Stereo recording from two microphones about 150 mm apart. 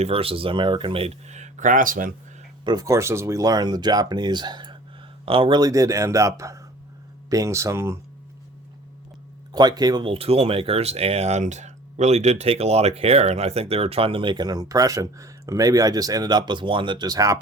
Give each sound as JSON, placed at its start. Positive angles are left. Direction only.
{"t": 0.0, "sound": "speech", "side_deg": -40}
{"t": 2.6, "sound": "speech", "side_deg": -25}
{"t": 5.5, "sound": "speech", "side_deg": -25}
{"t": 9.5, "sound": "speech", "side_deg": -25}